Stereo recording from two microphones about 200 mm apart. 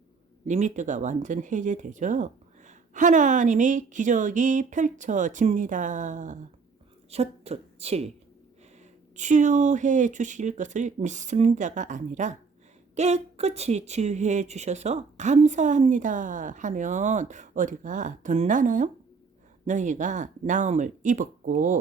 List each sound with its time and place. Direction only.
0.4 s a woman's voice: 35° right (ahead or behind)
9.1 s speech: 35° right (ahead or behind)